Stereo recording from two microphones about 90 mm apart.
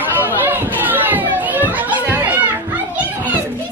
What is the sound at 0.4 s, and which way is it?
Children playing, 20° right (ahead or behind).